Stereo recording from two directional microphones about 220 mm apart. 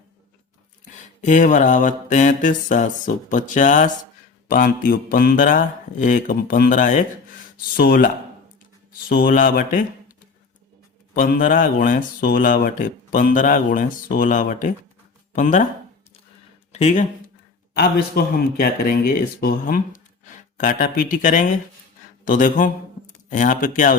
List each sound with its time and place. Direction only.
1.2 s speech: 35° left (ahead or behind)
11.1 s speech: 40° left (ahead or behind)
16.7 s speech: 30° left (ahead or behind)
17.7 s speech: 45° left (ahead or behind)